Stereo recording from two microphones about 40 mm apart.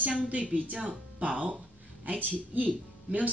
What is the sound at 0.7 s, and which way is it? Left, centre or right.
Speech, right.